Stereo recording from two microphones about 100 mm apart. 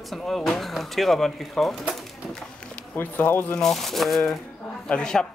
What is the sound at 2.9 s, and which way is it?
Speech, 20° left (ahead or behind).